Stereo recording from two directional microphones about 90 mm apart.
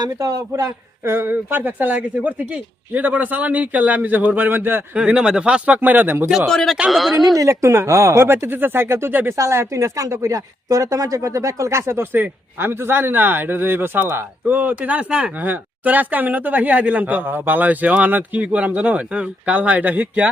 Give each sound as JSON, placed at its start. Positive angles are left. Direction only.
{"t": 0.0, "sound": "speech", "side_deg": -45}
{"t": 1.1, "sound": "speech", "side_deg": -25}
{"t": 4.9, "sound": "speech", "side_deg": -10}
{"t": 6.5, "sound": "speech", "side_deg": 5}
{"t": 7.3, "sound": "speech", "side_deg": -35}